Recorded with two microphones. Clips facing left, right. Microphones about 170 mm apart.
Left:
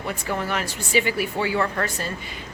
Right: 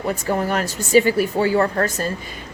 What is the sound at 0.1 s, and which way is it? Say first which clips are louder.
A woman's voice: right 5 dB; 40° right (ahead or behind).